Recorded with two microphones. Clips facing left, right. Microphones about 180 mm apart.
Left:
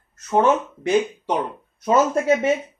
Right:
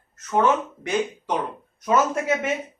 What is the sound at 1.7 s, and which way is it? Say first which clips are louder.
Speech: left 3 dB; 30° left (ahead or behind).